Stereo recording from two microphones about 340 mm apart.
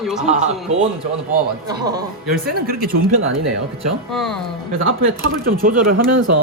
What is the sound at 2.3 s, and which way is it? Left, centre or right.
Speech, right.